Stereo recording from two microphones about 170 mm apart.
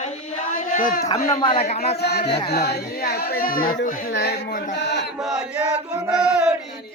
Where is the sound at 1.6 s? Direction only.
40° left (ahead or behind).